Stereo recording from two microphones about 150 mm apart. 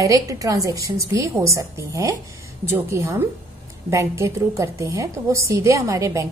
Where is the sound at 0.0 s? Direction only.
20° right (ahead or behind).